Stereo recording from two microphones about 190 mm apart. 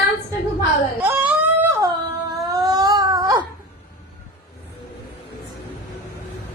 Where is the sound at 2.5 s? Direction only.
20° right (ahead or behind).